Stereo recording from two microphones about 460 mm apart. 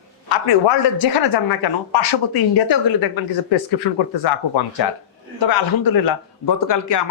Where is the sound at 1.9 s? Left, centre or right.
Left.